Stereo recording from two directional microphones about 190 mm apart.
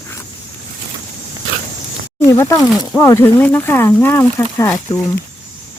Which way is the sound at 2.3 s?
15° left (ahead or behind).